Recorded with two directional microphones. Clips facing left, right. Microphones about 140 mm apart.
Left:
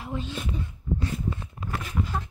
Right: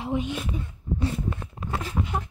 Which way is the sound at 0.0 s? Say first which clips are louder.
Right 6 dB; 15° right (ahead or behind).